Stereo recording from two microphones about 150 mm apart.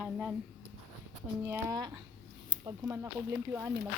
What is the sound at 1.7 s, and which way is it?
A woman's voice, 25° right (ahead or behind).